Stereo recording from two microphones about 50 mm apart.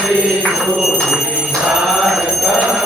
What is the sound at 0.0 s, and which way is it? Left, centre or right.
Music, centre.